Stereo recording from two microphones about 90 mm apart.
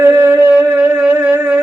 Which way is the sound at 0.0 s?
25° right (ahead or behind).